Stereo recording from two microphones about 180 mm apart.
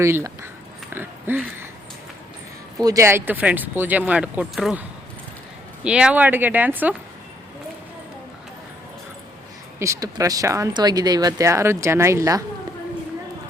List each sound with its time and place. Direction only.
0.0 s speech: 15° right (ahead or behind)
1.3 s speech: 10° right (ahead or behind)
2.8 s speech: 15° right (ahead or behind)
9.7 s speech: 15° right (ahead or behind)